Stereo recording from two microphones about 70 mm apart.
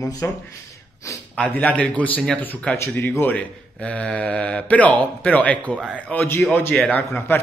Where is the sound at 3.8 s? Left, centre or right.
Centre.